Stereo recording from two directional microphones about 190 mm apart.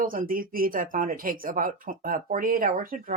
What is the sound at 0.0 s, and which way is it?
Speech, 50° right (ahead or behind).